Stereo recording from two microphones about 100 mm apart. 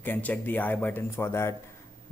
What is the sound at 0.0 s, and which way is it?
Speech, 15° left (ahead or behind).